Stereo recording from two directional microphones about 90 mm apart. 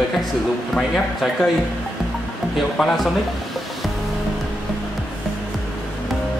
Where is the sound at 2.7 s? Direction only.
5° left (ahead or behind).